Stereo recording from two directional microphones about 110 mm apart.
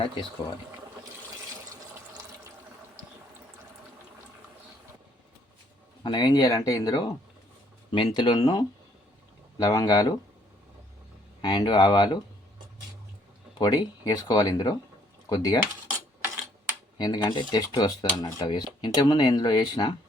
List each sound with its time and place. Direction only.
6.0 s speech: 40° left (ahead or behind)
11.4 s speech: 40° left (ahead or behind)
13.6 s speech: 35° left (ahead or behind)
17.0 s speech: 40° left (ahead or behind)